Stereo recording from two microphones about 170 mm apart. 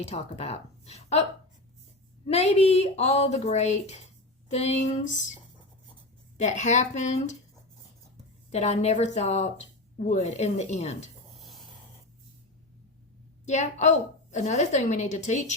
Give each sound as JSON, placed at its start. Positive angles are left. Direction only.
{"t": 0.0, "sound": "a woman's voice", "side_deg": 35}
{"t": 2.2, "sound": "a woman's voice", "side_deg": 40}
{"t": 6.4, "sound": "a woman's voice", "side_deg": 45}
{"t": 8.4, "sound": "a woman's voice", "side_deg": 40}
{"t": 13.4, "sound": "a woman's voice", "side_deg": 45}